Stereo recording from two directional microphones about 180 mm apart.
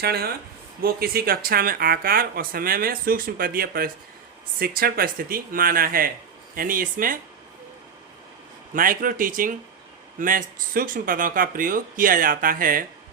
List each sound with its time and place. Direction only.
0.0 s speech: 60° right (ahead or behind)
8.7 s speech: 50° right (ahead or behind)